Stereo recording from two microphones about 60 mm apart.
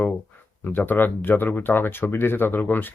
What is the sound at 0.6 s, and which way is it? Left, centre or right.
Speech, left.